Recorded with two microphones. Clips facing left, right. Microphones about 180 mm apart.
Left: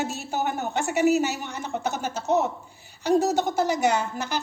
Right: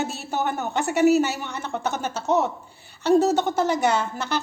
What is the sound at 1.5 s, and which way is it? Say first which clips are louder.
Speech: right 1 dB; 10° left (ahead or behind).